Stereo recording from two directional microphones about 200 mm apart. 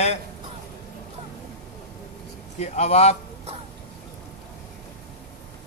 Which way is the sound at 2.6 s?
35° left (ahead or behind).